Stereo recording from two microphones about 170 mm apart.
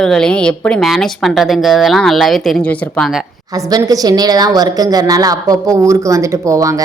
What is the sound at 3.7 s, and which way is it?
A woman's voice, 20° right (ahead or behind).